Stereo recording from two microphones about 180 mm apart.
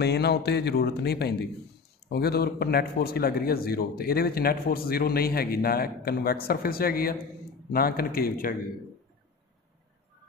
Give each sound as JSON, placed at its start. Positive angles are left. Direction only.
{"t": 0.0, "sound": "a man's voice", "side_deg": 65}